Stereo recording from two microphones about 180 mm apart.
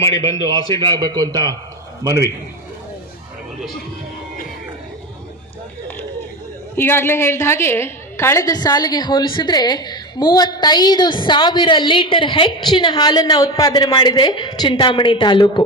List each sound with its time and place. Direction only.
0.8 s a man's voice: 25° right (ahead or behind)
6.7 s a woman's voice: 15° left (ahead or behind)